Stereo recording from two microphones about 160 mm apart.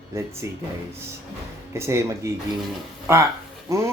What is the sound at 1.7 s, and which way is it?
Speech, 15° right (ahead or behind).